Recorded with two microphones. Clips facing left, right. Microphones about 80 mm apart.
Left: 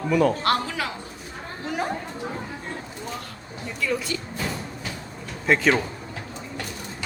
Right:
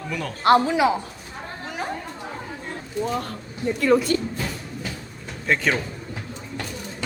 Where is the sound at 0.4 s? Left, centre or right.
Right.